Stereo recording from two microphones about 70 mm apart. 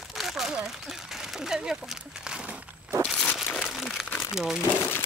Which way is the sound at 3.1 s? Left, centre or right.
Centre.